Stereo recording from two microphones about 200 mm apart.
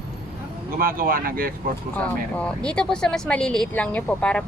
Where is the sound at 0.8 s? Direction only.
45° right (ahead or behind).